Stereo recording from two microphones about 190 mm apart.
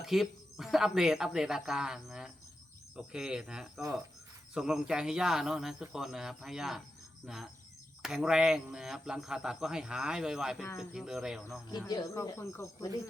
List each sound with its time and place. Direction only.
0.0 s a man's voice: centre (ahead or behind)
11.9 s speech: 20° left (ahead or behind)